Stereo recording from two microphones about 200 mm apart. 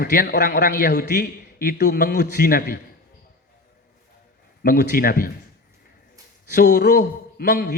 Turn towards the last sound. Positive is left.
turn(degrees=50)  # may be behind; listen again after turning